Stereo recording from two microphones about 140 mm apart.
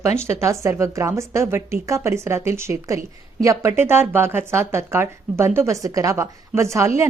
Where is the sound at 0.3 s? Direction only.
20° right (ahead or behind).